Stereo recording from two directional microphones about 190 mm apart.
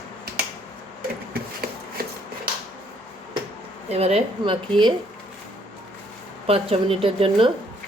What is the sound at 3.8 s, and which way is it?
Speech, 35° right (ahead or behind).